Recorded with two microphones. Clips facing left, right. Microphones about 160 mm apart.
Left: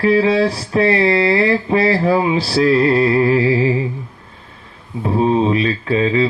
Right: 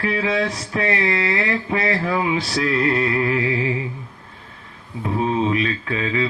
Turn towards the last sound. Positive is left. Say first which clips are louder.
# left 7 dB
turn(degrees=30)  # may be behind; listen again after turning